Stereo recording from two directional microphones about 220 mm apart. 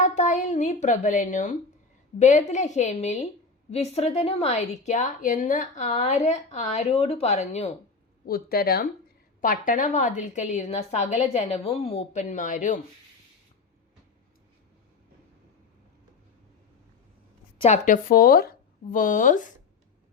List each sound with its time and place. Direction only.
0.0 s a woman's voice: 35° left (ahead or behind)
8.3 s a woman's voice: 45° left (ahead or behind)
17.6 s a woman's voice: 35° left (ahead or behind)